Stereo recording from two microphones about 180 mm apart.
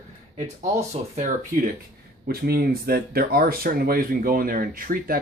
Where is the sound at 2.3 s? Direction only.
55° right (ahead or behind).